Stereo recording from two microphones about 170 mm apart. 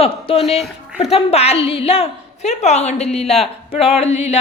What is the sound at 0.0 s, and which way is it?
A woman's voice, 35° left (ahead or behind).